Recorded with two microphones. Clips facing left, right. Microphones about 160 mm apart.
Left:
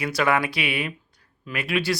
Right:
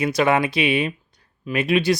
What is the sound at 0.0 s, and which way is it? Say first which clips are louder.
Speech: right 4 dB; 20° right (ahead or behind).